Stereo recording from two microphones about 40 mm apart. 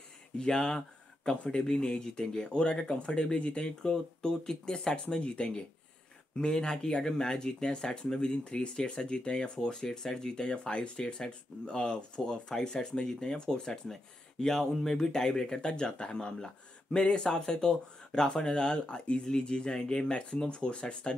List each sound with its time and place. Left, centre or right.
0.4 s speech: left